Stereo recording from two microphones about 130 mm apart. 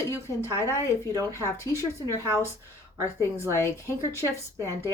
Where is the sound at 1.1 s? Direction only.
25° right (ahead or behind).